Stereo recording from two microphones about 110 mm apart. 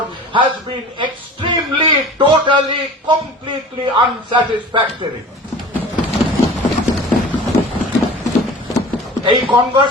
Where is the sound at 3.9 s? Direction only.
50° right (ahead or behind).